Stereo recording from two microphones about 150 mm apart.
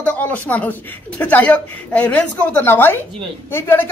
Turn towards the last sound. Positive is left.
turn(degrees=15)  # may be behind; listen again after turning